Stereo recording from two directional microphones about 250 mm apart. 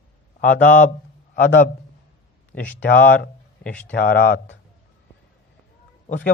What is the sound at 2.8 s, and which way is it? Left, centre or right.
A man's voice, left.